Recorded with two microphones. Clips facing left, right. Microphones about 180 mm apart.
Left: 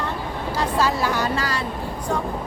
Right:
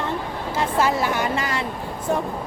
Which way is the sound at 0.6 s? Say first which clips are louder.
Right 1 dB; 20° right (ahead or behind).